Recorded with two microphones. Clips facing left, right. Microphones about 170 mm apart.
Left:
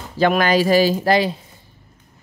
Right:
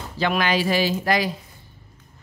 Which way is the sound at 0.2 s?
45° left (ahead or behind).